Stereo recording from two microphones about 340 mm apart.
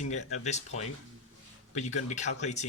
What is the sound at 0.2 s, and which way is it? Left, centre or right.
Speech, left.